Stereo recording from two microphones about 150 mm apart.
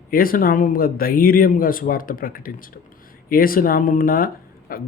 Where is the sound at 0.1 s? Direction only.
70° left (ahead or behind).